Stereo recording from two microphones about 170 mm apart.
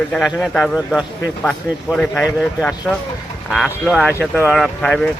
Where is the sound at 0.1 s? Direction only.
5° left (ahead or behind).